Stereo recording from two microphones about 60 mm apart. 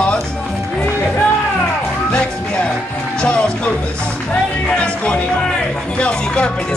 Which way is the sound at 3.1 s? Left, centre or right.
Centre.